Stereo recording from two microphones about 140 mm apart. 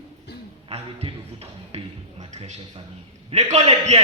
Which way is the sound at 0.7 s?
45° right (ahead or behind).